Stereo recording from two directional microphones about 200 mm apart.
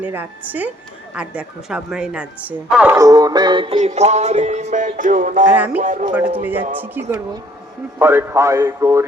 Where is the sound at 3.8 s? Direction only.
35° right (ahead or behind).